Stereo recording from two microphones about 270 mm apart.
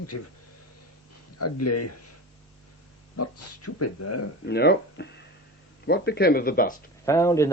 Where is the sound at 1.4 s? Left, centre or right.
Left.